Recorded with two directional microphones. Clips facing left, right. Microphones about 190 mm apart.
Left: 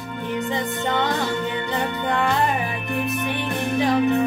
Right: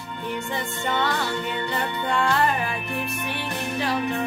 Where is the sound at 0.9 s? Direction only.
20° left (ahead or behind).